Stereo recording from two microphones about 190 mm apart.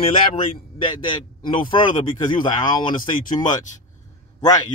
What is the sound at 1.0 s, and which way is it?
A man's voice, 25° left (ahead or behind).